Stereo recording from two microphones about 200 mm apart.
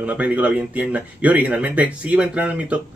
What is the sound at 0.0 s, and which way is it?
Speech, 10° right (ahead or behind).